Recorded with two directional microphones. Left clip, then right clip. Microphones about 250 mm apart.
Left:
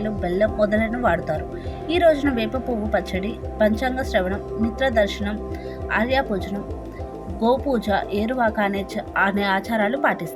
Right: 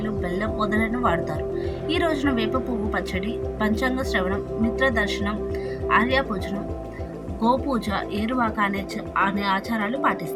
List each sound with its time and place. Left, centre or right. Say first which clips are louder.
0.3 s a woman's voice: left 7 dB; centre
1.9 s a woman's voice: left 6 dB; centre
7.4 s a woman's voice: left 2 dB; centre